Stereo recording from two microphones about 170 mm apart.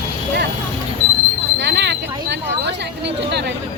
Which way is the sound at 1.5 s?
90° right.